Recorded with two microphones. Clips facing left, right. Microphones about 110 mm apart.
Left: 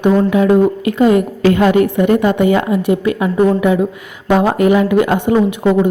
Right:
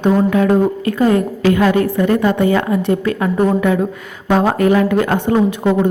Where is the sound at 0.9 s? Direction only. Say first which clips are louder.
Left 2 dB; 20° left (ahead or behind).